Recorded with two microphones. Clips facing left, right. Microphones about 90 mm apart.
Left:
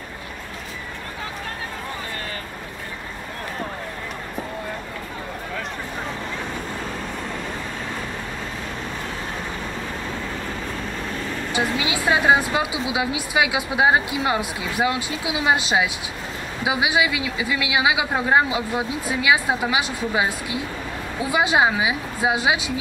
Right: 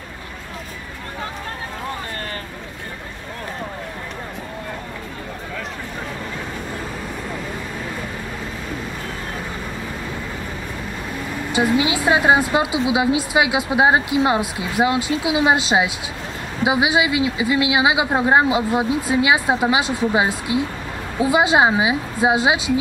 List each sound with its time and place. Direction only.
11.5 s speech: 20° right (ahead or behind)